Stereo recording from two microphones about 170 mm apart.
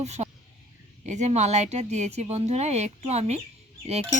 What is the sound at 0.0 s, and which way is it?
Speech, 40° right (ahead or behind).